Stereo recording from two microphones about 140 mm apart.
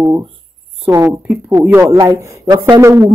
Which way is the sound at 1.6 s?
15° right (ahead or behind).